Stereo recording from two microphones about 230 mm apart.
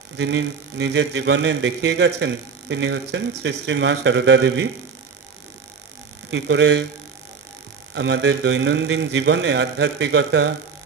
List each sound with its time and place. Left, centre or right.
0.2 s a man's voice: right
6.3 s a man's voice: right
7.9 s a man's voice: right